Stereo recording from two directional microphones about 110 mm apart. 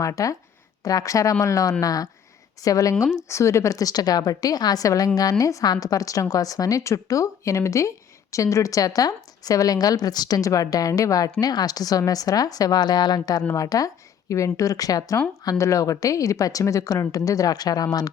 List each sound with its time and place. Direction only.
0.0 s a woman's voice: 30° left (ahead or behind)